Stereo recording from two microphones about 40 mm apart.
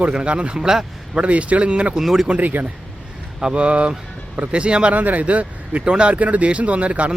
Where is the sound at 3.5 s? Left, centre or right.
Right.